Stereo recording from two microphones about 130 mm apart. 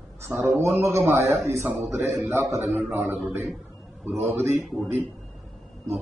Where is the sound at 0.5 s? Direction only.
20° right (ahead or behind).